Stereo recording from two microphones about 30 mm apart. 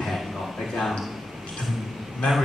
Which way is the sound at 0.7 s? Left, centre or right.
Centre.